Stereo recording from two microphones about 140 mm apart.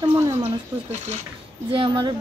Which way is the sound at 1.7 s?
35° right (ahead or behind).